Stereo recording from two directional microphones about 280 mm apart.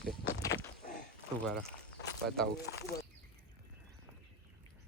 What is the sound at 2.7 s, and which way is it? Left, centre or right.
Speech, left.